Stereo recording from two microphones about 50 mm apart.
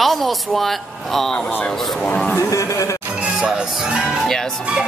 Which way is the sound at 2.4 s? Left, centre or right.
Left.